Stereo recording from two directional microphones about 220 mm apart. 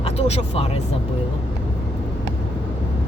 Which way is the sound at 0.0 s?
25° left (ahead or behind).